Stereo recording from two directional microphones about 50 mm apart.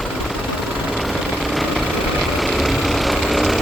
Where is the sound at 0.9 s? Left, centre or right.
Centre.